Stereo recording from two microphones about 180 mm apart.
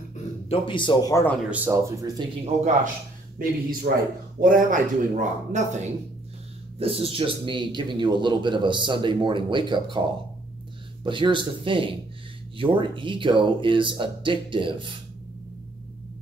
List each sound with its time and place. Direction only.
0.5 s speech: 25° left (ahead or behind)
1.5 s speech: 10° right (ahead or behind)
2.4 s a man's voice: 40° right (ahead or behind)
4.4 s speech: 50° right (ahead or behind); by 10.0 s 25° right (ahead or behind)
11.1 s speech: 25° right (ahead or behind)